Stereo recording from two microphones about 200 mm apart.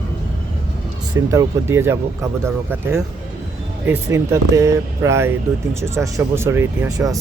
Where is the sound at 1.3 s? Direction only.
15° right (ahead or behind).